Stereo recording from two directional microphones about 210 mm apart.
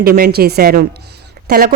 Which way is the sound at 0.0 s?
45° right (ahead or behind).